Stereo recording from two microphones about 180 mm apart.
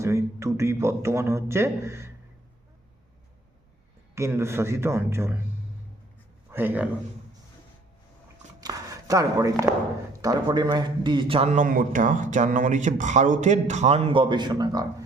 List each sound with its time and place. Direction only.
0.0 s a man's voice: 15° right (ahead or behind)
4.1 s a man's voice: 15° right (ahead or behind)
6.5 s speech: 10° right (ahead or behind)
8.6 s a man's voice: 20° right (ahead or behind)